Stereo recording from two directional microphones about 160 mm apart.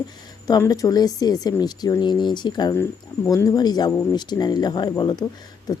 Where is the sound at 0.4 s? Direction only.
20° left (ahead or behind).